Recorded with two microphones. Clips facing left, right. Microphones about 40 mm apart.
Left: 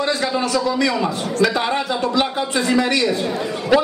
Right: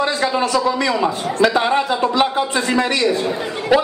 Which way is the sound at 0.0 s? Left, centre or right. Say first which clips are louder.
Right 2 dB; centre.